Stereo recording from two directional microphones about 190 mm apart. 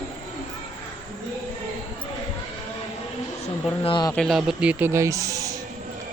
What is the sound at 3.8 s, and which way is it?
Speech, 25° left (ahead or behind).